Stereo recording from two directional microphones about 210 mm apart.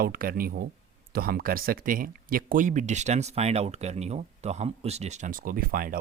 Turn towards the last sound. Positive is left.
turn(degrees=-45)  # may be behind; listen again after turning